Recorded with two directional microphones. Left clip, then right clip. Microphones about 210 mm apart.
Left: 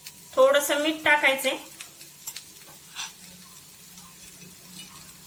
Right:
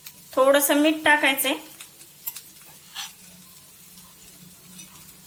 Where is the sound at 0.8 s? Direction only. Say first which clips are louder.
Right 3 dB; 50° right (ahead or behind).